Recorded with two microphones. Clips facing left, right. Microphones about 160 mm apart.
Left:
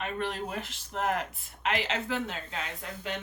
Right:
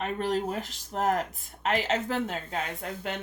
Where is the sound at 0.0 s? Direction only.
40° right (ahead or behind).